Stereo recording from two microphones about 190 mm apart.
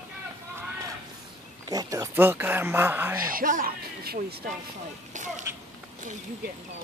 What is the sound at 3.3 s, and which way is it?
Speech, 45° right (ahead or behind).